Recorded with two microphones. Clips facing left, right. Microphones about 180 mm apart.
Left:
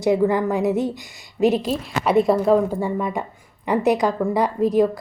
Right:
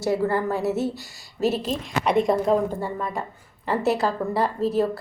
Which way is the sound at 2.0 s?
5° left (ahead or behind).